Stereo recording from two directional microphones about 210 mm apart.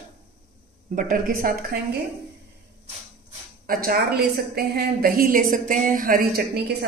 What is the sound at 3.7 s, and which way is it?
A woman's voice, 45° right (ahead or behind).